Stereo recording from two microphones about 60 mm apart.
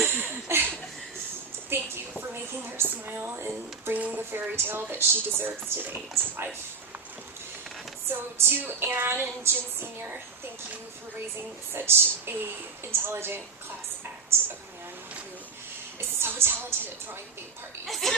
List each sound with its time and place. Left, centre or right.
0.0 s a sound: right
1.7 s a sound: right
3.1 s speech: right
3.9 s speech: right
4.3 s speech: right
8.0 s speech: right
11.7 s speech: right
16.0 s speech: right
17.8 s speech: centre